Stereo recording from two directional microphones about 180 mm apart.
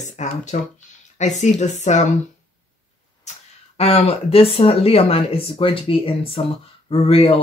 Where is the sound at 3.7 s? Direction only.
35° left (ahead or behind).